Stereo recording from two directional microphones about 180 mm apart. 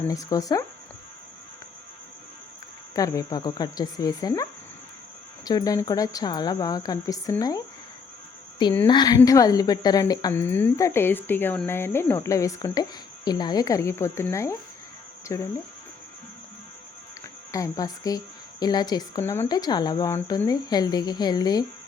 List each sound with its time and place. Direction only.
0.1 s speech: 20° left (ahead or behind)
2.9 s speech: 20° left (ahead or behind)
5.5 s speech: 20° left (ahead or behind)
8.9 s a woman's voice: 25° left (ahead or behind)
17.5 s speech: 20° left (ahead or behind)